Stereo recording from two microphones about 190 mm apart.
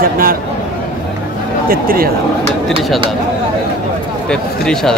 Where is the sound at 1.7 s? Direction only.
50° right (ahead or behind).